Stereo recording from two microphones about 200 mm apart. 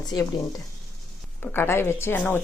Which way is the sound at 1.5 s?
10° left (ahead or behind).